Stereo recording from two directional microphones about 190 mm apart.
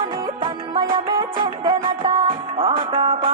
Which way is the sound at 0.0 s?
25° right (ahead or behind).